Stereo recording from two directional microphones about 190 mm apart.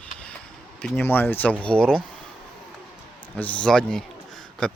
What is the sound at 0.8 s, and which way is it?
Speech, 5° left (ahead or behind).